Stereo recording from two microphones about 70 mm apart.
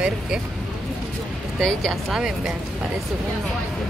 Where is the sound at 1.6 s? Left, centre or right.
Centre.